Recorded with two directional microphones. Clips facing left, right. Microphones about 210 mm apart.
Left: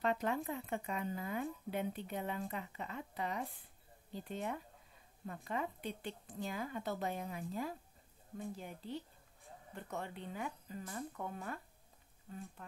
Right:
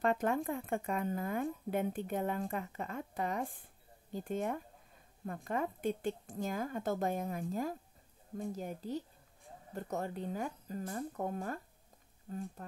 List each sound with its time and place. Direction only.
0.0 s speech: 50° right (ahead or behind)